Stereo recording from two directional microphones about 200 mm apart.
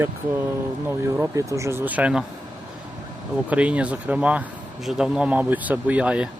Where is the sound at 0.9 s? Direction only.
15° right (ahead or behind).